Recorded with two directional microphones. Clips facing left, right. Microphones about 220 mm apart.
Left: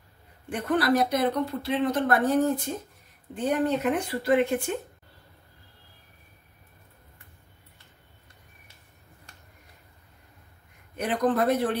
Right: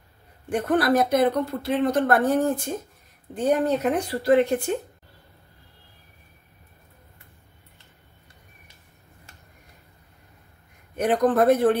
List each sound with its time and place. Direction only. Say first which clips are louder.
0.5 s speech: right 3 dB; 45° right (ahead or behind)
11.0 s speech: right 5 dB; 50° right (ahead or behind)